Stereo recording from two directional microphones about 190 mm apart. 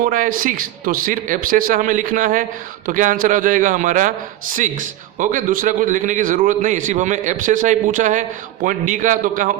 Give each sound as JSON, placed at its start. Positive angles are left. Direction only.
{"t": 0.0, "sound": "speech", "side_deg": -45}